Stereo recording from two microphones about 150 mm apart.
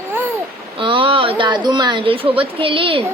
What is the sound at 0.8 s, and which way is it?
A woman's voice, 35° right (ahead or behind).